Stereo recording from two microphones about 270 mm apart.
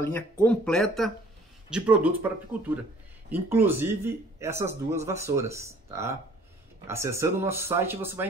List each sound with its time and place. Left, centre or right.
0.0 s speech: centre